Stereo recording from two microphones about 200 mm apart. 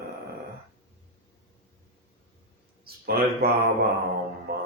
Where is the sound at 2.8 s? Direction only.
50° right (ahead or behind).